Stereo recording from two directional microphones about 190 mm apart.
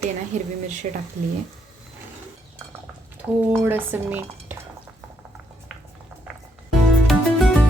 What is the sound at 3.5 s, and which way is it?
Speech, 10° right (ahead or behind).